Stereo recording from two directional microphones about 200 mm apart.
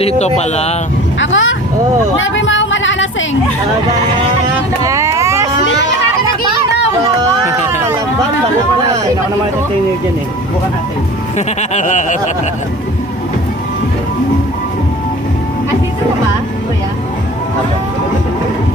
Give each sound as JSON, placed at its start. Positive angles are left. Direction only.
{"t": 0.2, "sound": "speech", "side_deg": 35}
{"t": 1.2, "sound": "speech", "side_deg": 75}
{"t": 4.8, "sound": "a sound", "side_deg": -15}
{"t": 7.2, "sound": "run", "side_deg": -15}
{"t": 11.3, "sound": "speech", "side_deg": 35}